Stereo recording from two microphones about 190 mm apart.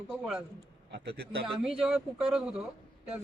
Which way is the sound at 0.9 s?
60° right (ahead or behind).